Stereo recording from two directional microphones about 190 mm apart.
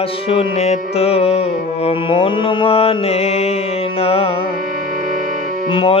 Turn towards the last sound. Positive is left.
turn(degrees=25)  # may be behind; listen again after turning